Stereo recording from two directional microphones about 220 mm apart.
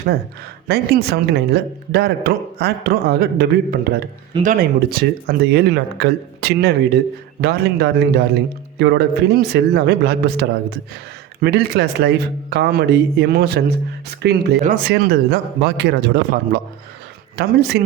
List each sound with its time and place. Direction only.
0.7 s a woman's voice: 45° right (ahead or behind)